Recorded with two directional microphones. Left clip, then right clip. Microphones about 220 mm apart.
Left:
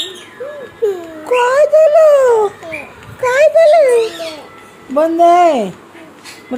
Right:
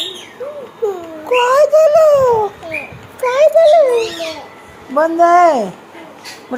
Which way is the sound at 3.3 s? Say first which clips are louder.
Left 1 dB; 30° left (ahead or behind).